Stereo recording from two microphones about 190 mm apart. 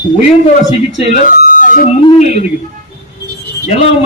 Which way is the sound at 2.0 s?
35° left (ahead or behind).